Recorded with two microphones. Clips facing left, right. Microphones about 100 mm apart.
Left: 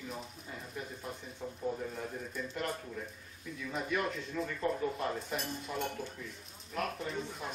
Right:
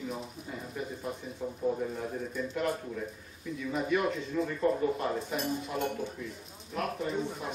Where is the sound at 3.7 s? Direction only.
Centre (ahead or behind).